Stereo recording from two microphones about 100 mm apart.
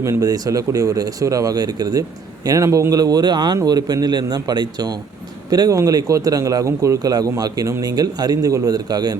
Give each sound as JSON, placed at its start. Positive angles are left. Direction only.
{"t": 0.0, "sound": "speech", "side_deg": -35}